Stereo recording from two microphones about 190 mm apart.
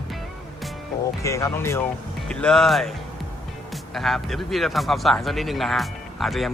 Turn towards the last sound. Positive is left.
turn(degrees=0)  # may be behind; listen again after turning